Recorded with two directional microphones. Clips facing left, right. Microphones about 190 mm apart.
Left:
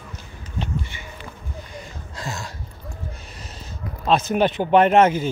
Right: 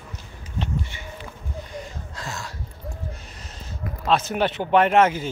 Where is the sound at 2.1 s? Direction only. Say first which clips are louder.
Left 3 dB; 15° left (ahead or behind).